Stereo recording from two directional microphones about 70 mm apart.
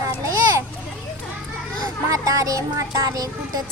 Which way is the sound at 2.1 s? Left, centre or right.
Right.